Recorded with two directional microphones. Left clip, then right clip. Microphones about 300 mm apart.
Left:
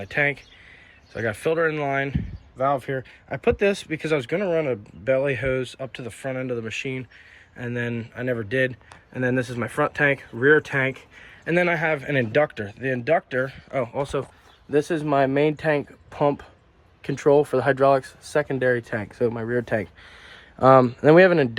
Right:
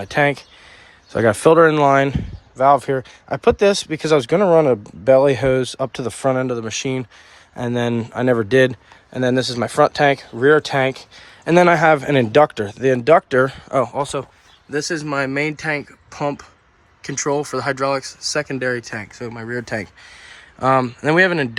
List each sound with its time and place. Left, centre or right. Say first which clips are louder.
1.1 s speech: right 11 dB; centre
4.5 s speech: right 11 dB; right
4.8 s speech: right 9 dB; centre